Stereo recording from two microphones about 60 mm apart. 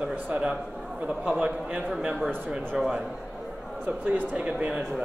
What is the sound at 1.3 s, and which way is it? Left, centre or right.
A man's voice, centre.